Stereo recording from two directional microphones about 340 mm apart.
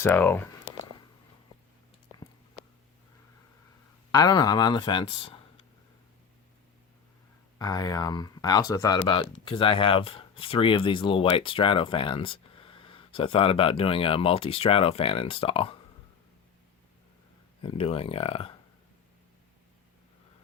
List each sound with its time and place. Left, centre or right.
0.0 s speech: centre
4.1 s speech: centre
7.6 s speech: centre
17.6 s speech: centre